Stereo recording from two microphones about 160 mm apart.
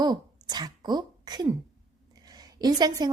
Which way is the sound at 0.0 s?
25° right (ahead or behind).